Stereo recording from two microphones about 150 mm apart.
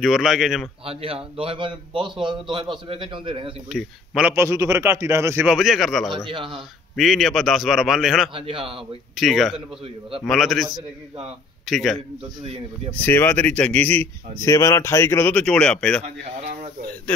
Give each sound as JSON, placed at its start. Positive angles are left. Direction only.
{"t": 0.0, "sound": "a man's voice", "side_deg": 0}
{"t": 0.8, "sound": "a man's voice", "side_deg": -40}
{"t": 3.7, "sound": "a man's voice", "side_deg": -5}
{"t": 5.5, "sound": "a man's voice", "side_deg": 0}
{"t": 6.2, "sound": "a man's voice", "side_deg": -35}
{"t": 7.0, "sound": "a man's voice", "side_deg": 0}
{"t": 8.4, "sound": "a man's voice", "side_deg": -35}
{"t": 9.1, "sound": "a man's voice", "side_deg": 0}
{"t": 12.9, "sound": "speech", "side_deg": 15}
{"t": 14.4, "sound": "speech", "side_deg": 20}